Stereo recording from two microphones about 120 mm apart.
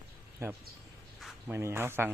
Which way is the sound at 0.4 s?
20° right (ahead or behind).